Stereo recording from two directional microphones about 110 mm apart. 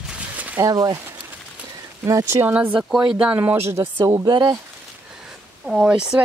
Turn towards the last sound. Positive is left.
turn(degrees=-10)  # may be behind; listen again after turning